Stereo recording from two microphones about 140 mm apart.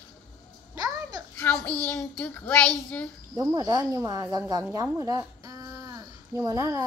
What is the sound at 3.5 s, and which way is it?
Speech, 25° right (ahead or behind).